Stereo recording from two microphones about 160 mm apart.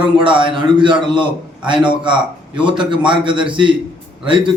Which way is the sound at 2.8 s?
30° right (ahead or behind).